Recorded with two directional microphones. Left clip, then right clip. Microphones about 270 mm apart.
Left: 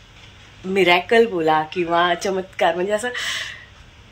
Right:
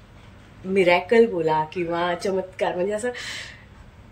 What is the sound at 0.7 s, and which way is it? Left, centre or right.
Speech, centre.